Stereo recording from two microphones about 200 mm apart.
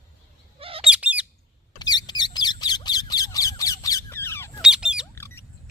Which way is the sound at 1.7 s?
20° left (ahead or behind).